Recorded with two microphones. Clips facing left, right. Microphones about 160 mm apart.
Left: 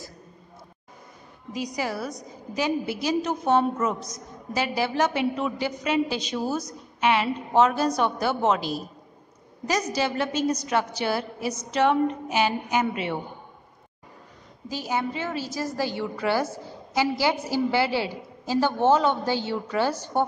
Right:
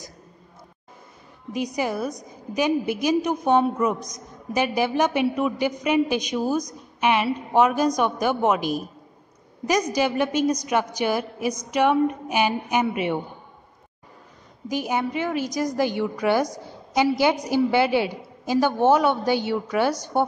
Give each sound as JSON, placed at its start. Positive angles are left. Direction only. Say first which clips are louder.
{"t": 1.8, "sound": "a woman's voice", "louder": "right 4 dB", "side_deg": -20}
{"t": 14.7, "sound": "a woman's voice", "louder": "right 3 dB", "side_deg": -15}